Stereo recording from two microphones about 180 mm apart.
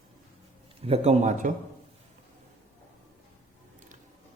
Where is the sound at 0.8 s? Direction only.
35° right (ahead or behind).